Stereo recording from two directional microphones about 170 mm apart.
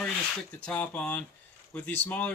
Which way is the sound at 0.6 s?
5° left (ahead or behind).